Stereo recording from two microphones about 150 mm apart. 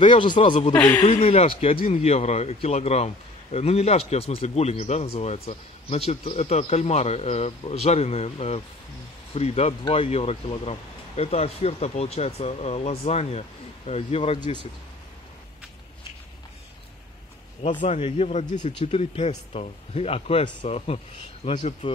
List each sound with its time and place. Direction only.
0.0 s speech: 35° left (ahead or behind)
0.7 s speech: 10° left (ahead or behind)
1.0 s speech: 50° left (ahead or behind); by 14.7 s 30° left (ahead or behind)
17.7 s speech: 45° left (ahead or behind)
18.7 s speech: 40° left (ahead or behind)